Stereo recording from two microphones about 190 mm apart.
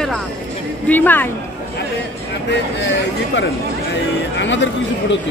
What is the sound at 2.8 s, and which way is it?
Speech, 65° left (ahead or behind).